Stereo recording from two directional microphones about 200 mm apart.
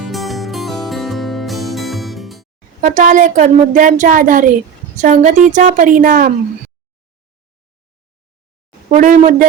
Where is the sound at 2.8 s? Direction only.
40° right (ahead or behind).